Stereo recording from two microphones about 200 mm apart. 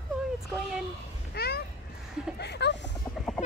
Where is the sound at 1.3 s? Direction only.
50° left (ahead or behind).